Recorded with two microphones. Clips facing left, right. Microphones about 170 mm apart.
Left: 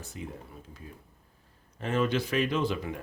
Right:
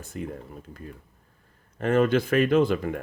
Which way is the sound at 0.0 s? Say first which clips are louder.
Right 6 dB; 55° right (ahead or behind).